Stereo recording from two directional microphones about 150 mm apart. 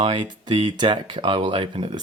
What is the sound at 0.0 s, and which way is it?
Speech, 35° right (ahead or behind).